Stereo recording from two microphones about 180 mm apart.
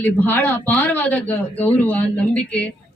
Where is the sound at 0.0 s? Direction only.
10° left (ahead or behind).